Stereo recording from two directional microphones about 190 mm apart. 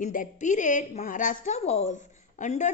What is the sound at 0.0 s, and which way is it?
A woman's voice, 40° left (ahead or behind).